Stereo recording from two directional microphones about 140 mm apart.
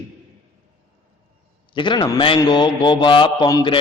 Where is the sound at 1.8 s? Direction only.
35° left (ahead or behind).